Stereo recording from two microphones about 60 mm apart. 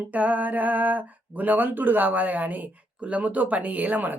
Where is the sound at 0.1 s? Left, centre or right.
Right.